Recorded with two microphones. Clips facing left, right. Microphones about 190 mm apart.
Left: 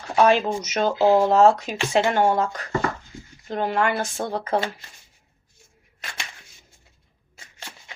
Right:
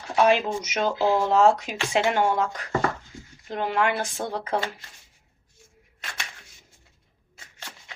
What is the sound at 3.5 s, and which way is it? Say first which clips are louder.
Speech: left 2 dB; 45° left (ahead or behind).